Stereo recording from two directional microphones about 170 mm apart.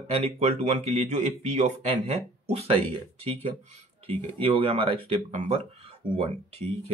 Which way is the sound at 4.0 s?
30° right (ahead or behind).